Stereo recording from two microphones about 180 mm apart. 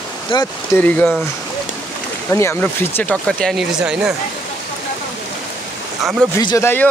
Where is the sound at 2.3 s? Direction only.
15° left (ahead or behind); by 4.1 s 5° right (ahead or behind).